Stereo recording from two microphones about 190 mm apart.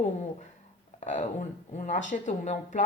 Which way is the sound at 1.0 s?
40° left (ahead or behind).